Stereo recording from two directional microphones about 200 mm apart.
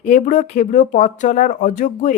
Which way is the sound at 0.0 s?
40° left (ahead or behind).